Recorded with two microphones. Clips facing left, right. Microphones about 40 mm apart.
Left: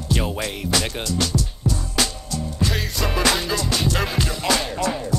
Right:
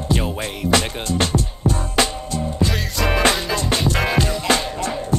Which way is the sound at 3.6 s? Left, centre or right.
Right.